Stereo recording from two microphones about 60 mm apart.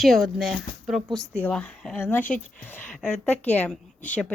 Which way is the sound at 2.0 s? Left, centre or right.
Left.